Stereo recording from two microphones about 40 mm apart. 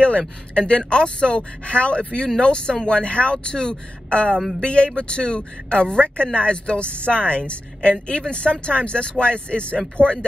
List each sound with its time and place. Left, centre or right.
0.6 s speech: left
10.0 s speech: right